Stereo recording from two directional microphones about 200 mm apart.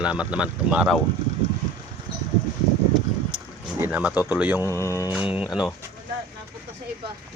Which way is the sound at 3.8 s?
10° right (ahead or behind).